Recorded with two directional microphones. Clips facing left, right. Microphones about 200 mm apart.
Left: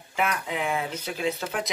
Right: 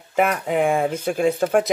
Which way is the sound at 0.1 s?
50° right (ahead or behind).